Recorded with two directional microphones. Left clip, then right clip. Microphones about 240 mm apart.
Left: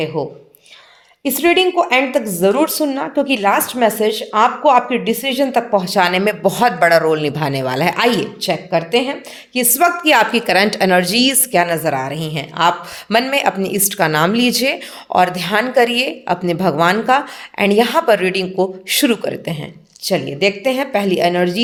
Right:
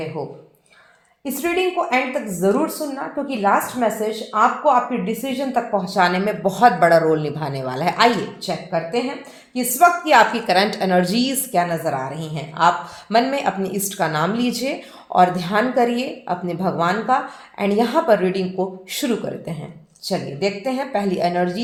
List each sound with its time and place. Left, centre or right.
0.2 s a woman's voice: left